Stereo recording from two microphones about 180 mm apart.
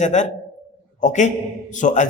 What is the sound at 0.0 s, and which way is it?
A man's voice, 40° left (ahead or behind).